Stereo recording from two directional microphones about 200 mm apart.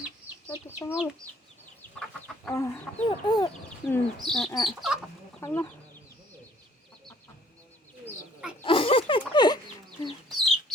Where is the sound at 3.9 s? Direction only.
Centre (ahead or behind).